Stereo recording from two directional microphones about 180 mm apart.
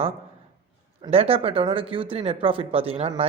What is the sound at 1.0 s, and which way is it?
Speech, 30° right (ahead or behind).